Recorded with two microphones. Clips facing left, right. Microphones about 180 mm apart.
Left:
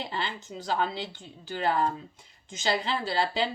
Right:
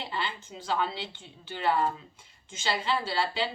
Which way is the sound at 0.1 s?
40° left (ahead or behind).